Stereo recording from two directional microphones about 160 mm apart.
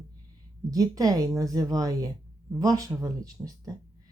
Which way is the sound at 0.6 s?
20° right (ahead or behind).